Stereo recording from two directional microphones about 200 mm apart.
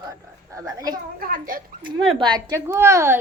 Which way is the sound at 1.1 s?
45° right (ahead or behind).